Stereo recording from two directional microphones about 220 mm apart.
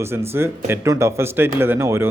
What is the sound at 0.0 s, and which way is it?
Speech, 10° right (ahead or behind).